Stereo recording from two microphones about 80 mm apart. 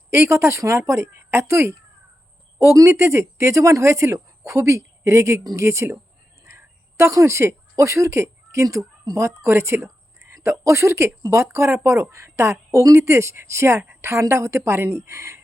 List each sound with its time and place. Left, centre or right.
0.1 s a woman's voice: right